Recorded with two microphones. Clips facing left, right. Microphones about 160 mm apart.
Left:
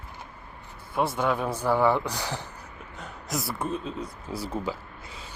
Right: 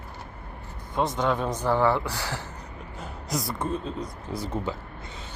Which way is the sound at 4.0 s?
10° left (ahead or behind).